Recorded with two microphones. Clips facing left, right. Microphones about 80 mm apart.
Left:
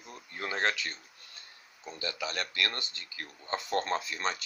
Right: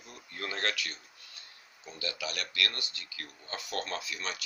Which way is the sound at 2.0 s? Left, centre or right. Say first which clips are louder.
Left 2 dB; left.